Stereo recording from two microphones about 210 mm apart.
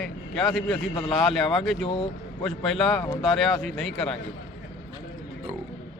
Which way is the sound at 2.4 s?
Centre (ahead or behind).